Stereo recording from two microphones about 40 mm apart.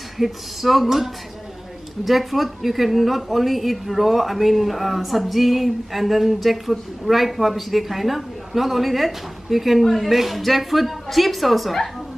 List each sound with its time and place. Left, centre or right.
0.2 s a woman's voice: centre